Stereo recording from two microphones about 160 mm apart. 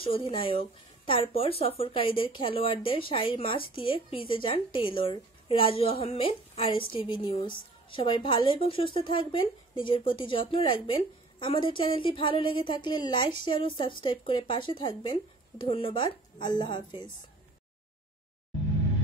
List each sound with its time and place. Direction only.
0.0 s speech: 35° left (ahead or behind)